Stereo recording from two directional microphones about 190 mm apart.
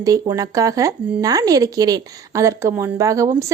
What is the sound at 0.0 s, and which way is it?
Speech, 15° right (ahead or behind).